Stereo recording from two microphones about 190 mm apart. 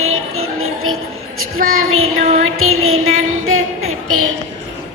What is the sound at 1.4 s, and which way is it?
Speech, 90° right.